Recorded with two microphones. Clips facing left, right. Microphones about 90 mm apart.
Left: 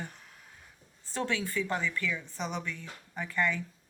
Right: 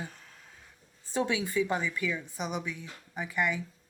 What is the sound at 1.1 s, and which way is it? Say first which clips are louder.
A woman's voice: right 3 dB; 15° right (ahead or behind).